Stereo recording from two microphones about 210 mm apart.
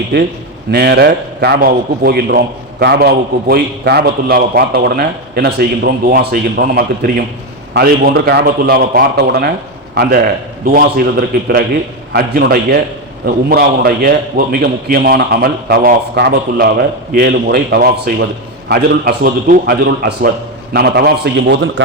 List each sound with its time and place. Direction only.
0.7 s a man's voice: 50° right (ahead or behind)